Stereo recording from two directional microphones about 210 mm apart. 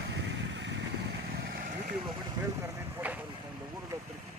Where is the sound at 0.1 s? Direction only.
60° right (ahead or behind).